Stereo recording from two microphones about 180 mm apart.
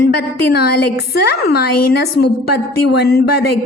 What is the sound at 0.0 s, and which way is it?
A woman's voice, 60° left (ahead or behind).